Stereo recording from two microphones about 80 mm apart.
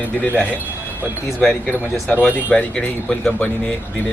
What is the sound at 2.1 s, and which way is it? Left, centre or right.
Speech, left.